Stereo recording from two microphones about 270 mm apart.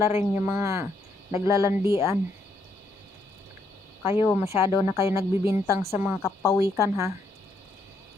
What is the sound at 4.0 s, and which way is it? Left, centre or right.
Speech, left.